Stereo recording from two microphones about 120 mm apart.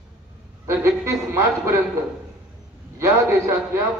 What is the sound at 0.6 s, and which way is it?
A man's voice, 25° right (ahead or behind).